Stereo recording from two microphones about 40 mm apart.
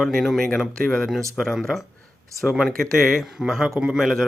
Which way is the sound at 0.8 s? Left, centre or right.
Centre.